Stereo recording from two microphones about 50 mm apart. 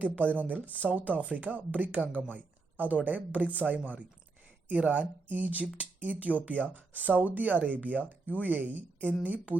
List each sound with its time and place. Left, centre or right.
0.3 s speech: right